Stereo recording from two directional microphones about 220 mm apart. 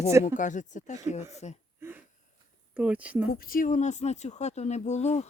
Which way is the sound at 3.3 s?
40° left (ahead or behind).